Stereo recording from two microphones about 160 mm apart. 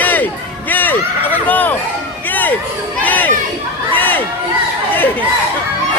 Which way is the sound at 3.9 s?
10° left (ahead or behind).